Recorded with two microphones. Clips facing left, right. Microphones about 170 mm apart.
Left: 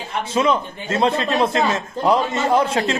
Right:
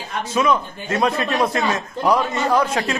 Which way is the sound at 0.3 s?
25° left (ahead or behind).